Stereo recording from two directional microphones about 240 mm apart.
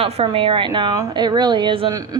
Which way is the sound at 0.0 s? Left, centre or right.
Right.